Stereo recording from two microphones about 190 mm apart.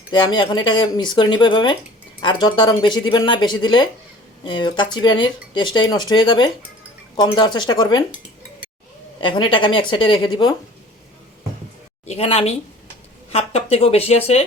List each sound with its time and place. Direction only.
0.1 s speech: 25° left (ahead or behind)
9.2 s speech: 25° left (ahead or behind)
12.0 s speech: 30° left (ahead or behind)